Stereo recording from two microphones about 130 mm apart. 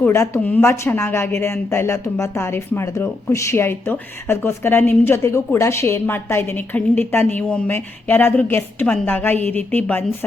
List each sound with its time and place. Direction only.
0.0 s a woman's voice: 20° left (ahead or behind)